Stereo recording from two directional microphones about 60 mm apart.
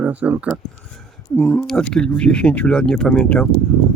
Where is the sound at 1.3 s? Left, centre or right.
Left.